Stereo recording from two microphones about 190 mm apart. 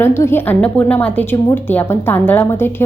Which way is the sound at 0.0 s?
15° left (ahead or behind).